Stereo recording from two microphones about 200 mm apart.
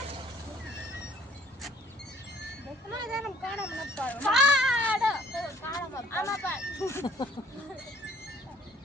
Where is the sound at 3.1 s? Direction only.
5° right (ahead or behind).